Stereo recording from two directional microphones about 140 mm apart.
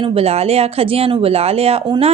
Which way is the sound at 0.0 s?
45° right (ahead or behind).